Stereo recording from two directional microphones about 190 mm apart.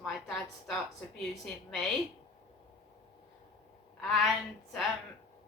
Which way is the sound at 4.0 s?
Centre (ahead or behind).